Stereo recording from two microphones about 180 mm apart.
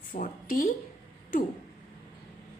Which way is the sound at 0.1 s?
50° left (ahead or behind).